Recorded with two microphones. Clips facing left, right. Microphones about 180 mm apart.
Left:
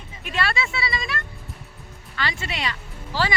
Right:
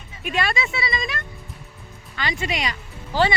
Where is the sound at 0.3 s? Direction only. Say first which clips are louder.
Right 1 dB; 15° right (ahead or behind).